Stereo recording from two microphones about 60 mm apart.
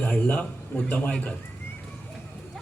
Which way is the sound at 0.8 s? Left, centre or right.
Left.